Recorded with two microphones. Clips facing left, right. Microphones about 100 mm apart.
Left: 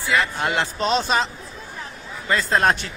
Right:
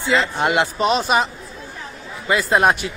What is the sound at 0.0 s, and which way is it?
Speech, 25° right (ahead or behind).